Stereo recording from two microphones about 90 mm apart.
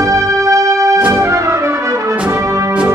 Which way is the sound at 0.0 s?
35° right (ahead or behind).